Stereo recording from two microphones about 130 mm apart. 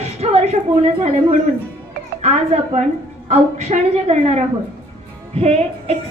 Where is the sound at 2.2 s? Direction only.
60° right (ahead or behind).